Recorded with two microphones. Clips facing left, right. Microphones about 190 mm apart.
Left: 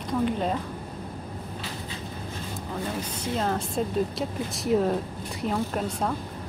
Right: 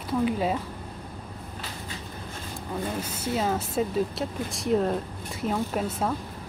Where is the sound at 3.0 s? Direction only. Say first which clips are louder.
Right 1 dB; 5° right (ahead or behind).